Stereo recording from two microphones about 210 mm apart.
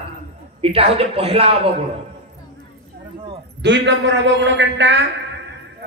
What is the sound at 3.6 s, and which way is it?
A man's voice, 55° right (ahead or behind).